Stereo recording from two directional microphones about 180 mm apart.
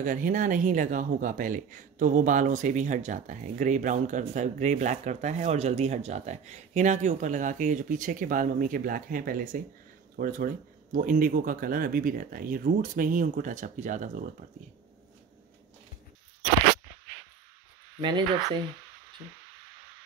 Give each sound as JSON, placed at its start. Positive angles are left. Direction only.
{"t": 0.0, "sound": "speech", "side_deg": -45}
{"t": 18.0, "sound": "speech", "side_deg": -25}